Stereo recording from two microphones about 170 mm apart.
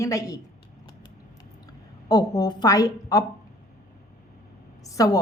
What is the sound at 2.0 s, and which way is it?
A woman's voice, 25° left (ahead or behind).